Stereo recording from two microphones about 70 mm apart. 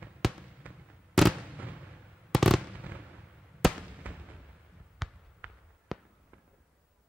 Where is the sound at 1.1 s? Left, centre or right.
Centre.